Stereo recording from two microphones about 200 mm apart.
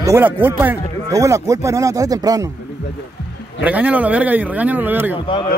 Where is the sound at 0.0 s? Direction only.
10° right (ahead or behind).